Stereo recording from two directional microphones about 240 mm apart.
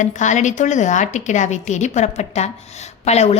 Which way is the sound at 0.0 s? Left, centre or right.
Left.